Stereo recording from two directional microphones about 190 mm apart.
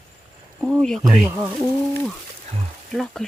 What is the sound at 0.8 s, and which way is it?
Speech, centre (ahead or behind).